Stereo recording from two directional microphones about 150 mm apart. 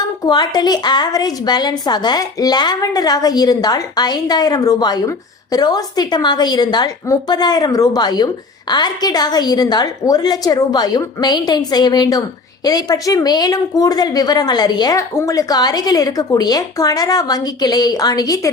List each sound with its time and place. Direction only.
0.3 s speech: 30° left (ahead or behind)